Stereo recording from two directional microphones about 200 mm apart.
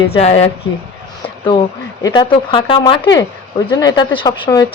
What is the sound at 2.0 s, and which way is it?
A woman's voice, 20° left (ahead or behind).